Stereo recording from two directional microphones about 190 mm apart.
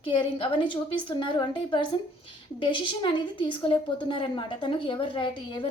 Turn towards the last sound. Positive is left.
turn(degrees=25)  # may be behind; listen again after turning